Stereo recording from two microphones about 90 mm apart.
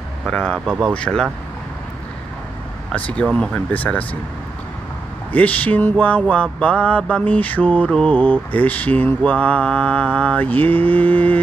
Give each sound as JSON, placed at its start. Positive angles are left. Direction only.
{"t": 0.3, "sound": "mantra", "side_deg": 10}
{"t": 0.7, "sound": "speech", "side_deg": -25}
{"t": 0.9, "sound": "mantra", "side_deg": 10}
{"t": 2.9, "sound": "speech", "side_deg": 15}
{"t": 3.3, "sound": "mantra", "side_deg": 15}
{"t": 5.3, "sound": "mantra", "side_deg": 15}